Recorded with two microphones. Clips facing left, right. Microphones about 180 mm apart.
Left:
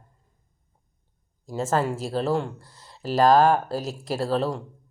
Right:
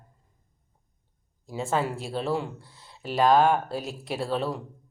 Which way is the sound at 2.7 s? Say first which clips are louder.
Left 2 dB; centre (ahead or behind).